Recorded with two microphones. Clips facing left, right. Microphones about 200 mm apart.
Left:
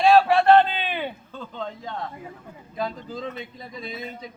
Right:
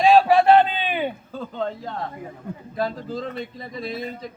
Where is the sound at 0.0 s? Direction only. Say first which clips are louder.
Right 2 dB; 15° right (ahead or behind).